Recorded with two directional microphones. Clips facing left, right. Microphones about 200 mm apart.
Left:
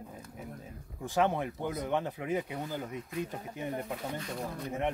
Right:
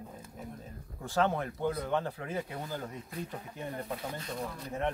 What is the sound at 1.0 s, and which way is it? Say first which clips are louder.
Speech: left 1 dB; 15° left (ahead or behind).